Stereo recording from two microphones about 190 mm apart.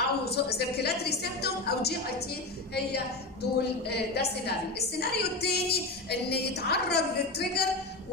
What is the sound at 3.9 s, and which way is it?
A woman's voice, 60° left (ahead or behind).